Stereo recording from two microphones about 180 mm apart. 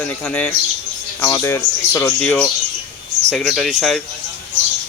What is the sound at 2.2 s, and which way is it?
Speech, 5° left (ahead or behind).